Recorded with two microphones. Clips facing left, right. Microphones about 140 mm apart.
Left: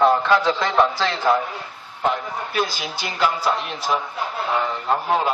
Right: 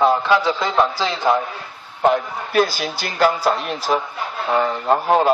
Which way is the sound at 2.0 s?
50° right (ahead or behind).